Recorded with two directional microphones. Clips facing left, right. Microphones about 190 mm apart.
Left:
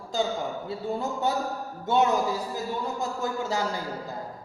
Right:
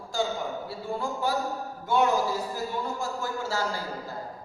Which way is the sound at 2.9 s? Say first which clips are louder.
Left 2 dB; 20° left (ahead or behind).